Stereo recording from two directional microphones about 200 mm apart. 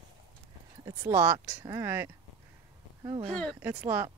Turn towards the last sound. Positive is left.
turn(degrees=-10)  # may be behind; listen again after turning